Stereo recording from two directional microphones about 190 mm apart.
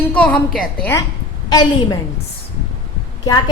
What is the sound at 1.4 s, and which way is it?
Speech, 20° left (ahead or behind).